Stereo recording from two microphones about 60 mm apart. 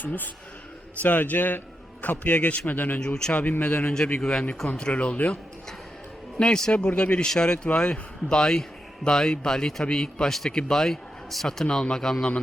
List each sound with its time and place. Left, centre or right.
0.0 s a man's voice: left
4.2 s a man's voice: centre